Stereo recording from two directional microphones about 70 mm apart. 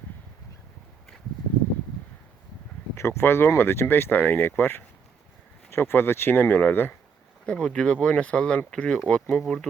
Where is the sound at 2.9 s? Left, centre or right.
Left.